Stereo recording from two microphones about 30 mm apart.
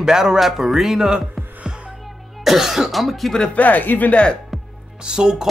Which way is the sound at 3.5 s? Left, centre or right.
Left.